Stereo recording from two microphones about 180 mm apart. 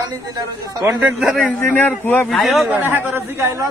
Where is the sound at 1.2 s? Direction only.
Centre (ahead or behind).